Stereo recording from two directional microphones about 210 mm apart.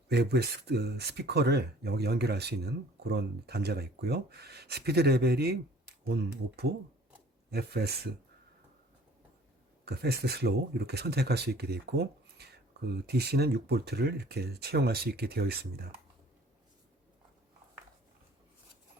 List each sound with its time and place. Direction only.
0.1 s speech: 50° right (ahead or behind)
9.8 s speech: 50° right (ahead or behind)